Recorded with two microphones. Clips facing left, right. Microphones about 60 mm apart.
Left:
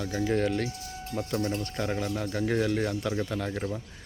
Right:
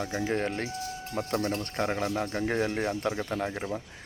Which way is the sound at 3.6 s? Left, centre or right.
Centre.